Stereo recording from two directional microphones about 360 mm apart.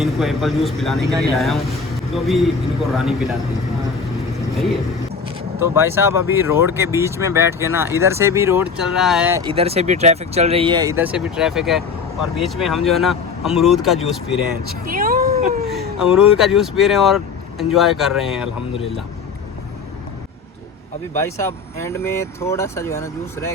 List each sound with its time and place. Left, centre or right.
0.0 s speech: centre
5.5 s speech: centre
9.5 s speech: centre
14.7 s speech: right
16.1 s speech: centre
21.2 s speech: centre